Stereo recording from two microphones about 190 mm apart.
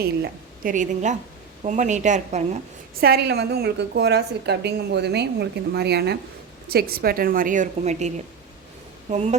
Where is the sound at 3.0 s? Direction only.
55° right (ahead or behind).